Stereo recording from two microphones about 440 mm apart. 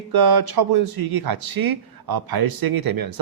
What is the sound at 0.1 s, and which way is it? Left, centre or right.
Speech, right.